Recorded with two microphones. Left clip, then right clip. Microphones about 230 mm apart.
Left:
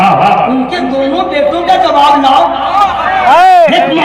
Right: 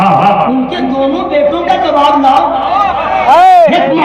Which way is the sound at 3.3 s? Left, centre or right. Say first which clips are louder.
Even; left.